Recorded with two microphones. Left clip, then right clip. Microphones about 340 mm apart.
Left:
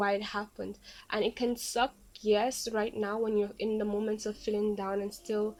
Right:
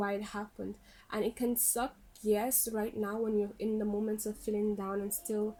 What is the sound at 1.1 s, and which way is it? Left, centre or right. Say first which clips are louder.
Speech: left 3 dB; left.